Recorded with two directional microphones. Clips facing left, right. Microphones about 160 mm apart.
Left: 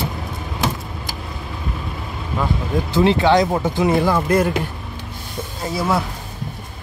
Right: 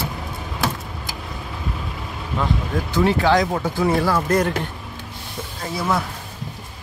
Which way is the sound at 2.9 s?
25° left (ahead or behind).